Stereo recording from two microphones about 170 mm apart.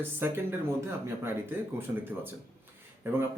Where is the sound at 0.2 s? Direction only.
15° right (ahead or behind).